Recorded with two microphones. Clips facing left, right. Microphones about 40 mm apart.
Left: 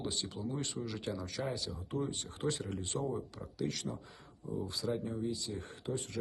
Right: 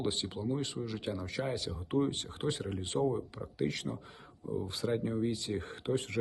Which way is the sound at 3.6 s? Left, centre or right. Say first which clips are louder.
Right 3 dB; right.